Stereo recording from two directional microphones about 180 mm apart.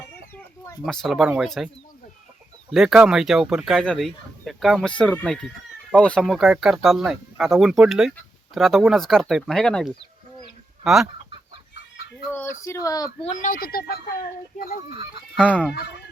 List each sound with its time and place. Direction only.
0.9 s speech: centre (ahead or behind)
12.3 s speech: 15° left (ahead or behind)
13.2 s speech: 45° left (ahead or behind)
14.8 s speech: 35° right (ahead or behind)
15.4 s speech: 5° left (ahead or behind)